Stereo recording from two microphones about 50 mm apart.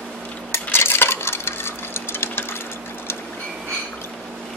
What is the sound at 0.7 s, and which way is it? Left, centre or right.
Coin, left.